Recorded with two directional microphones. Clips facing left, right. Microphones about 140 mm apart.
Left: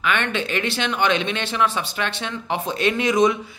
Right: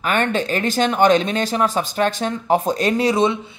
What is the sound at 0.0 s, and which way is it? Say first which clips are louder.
A man's voice: right 4 dB; 40° right (ahead or behind).